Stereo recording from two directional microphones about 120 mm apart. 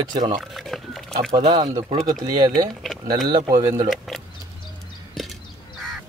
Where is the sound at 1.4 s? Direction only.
40° right (ahead or behind).